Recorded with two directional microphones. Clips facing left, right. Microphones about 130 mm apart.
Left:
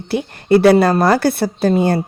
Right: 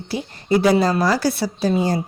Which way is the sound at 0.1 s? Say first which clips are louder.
Left 6 dB; 60° left (ahead or behind).